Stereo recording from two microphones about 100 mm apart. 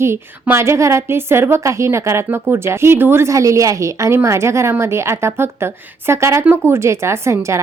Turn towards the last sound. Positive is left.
turn(degrees=-30)  # may be behind; listen again after turning